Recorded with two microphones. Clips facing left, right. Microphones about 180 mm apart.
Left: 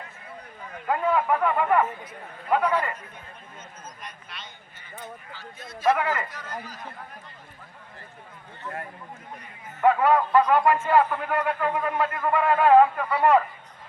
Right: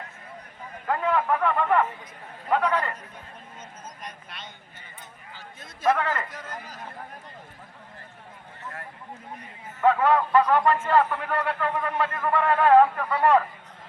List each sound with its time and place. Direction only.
0.9 s a man's voice: 10° left (ahead or behind)
4.0 s a sound: 50° right (ahead or behind)
6.0 s a man's voice: 10° left (ahead or behind)
6.2 s speech: 50° right (ahead or behind)
9.8 s a man's voice: 10° left (ahead or behind)